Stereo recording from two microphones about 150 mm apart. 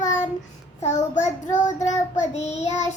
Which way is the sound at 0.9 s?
50° left (ahead or behind).